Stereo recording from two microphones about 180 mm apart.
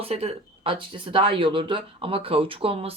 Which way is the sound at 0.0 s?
35° right (ahead or behind).